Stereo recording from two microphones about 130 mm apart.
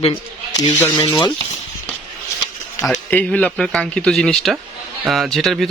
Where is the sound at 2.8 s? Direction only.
10° left (ahead or behind).